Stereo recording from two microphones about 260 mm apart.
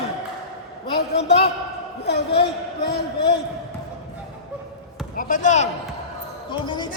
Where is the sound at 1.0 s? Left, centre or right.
Left.